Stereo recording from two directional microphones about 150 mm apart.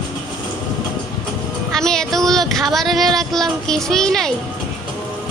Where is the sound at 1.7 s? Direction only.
5° left (ahead or behind).